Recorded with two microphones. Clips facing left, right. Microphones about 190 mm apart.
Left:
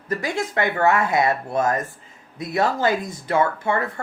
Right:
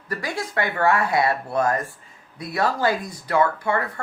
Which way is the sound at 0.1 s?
20° left (ahead or behind).